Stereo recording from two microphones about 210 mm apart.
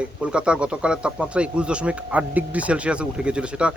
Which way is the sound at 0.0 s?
5° right (ahead or behind).